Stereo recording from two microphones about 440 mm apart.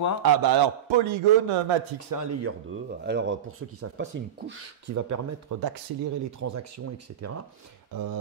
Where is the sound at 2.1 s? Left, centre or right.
Right.